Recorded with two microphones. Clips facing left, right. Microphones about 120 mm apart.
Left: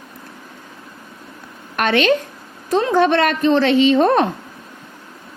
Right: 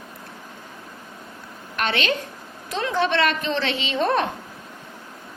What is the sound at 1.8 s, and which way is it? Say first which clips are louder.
A woman's voice: left 8 dB; 50° left (ahead or behind).